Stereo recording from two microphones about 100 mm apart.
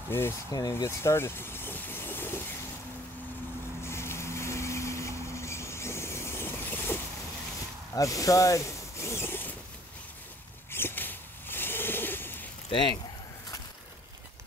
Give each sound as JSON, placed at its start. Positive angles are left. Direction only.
{"t": 0.1, "sound": "speech", "side_deg": 25}
{"t": 0.5, "sound": "speech", "side_deg": 40}
{"t": 0.7, "sound": "vehicle", "side_deg": 25}
{"t": 3.8, "sound": "vehicle", "side_deg": 25}
{"t": 7.9, "sound": "zipper", "side_deg": 35}
{"t": 10.7, "sound": "a sound", "side_deg": 25}